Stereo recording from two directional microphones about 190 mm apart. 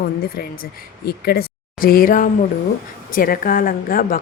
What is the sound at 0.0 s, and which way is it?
Speech, 50° left (ahead or behind).